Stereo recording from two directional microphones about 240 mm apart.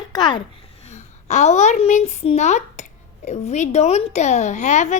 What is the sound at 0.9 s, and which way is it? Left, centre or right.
A woman's voice, left.